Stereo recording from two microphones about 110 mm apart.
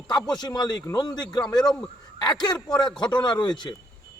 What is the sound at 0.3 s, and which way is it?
Speech, 40° left (ahead or behind).